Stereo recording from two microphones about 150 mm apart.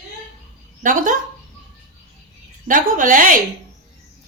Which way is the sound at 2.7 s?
65° right (ahead or behind).